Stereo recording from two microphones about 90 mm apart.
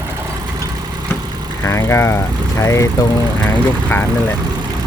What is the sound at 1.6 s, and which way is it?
Speech, 30° left (ahead or behind).